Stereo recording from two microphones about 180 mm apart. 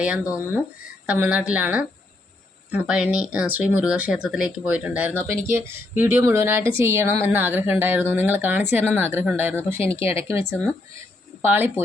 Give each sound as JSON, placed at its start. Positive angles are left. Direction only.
{"t": 1.0, "sound": "speech", "side_deg": -10}